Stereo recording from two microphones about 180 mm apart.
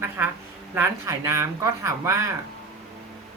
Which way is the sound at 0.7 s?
15° right (ahead or behind).